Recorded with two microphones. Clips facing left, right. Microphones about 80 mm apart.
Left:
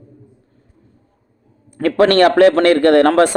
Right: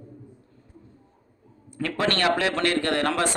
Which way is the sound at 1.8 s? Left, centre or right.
Left.